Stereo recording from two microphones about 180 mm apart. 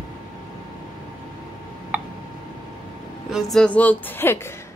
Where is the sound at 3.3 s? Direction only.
5° left (ahead or behind).